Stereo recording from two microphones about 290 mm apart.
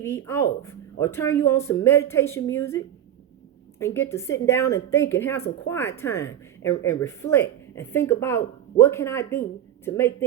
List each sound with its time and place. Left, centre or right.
0.0 s a woman's voice: centre